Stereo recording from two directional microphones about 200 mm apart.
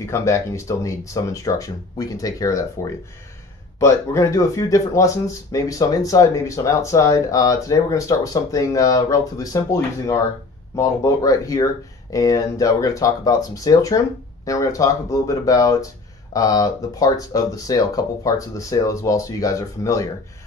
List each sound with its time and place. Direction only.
0.0 s speech: 15° left (ahead or behind)
11.2 s speech: 15° left (ahead or behind)